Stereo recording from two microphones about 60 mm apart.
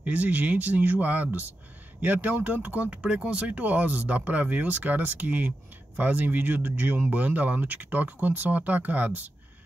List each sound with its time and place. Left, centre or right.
0.0 s speech: right